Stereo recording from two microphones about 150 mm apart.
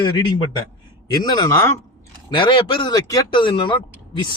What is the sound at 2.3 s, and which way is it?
Speech, 35° left (ahead or behind).